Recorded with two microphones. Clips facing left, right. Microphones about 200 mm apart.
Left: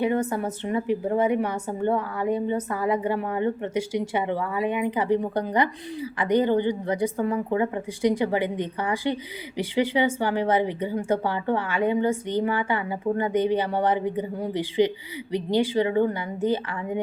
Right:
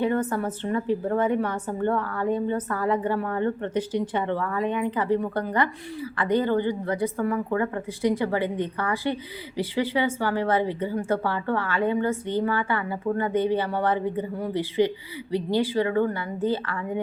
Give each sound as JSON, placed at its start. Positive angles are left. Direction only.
{"t": 0.0, "sound": "speech", "side_deg": 10}